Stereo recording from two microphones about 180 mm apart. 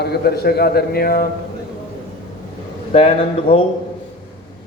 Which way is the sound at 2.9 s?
35° left (ahead or behind).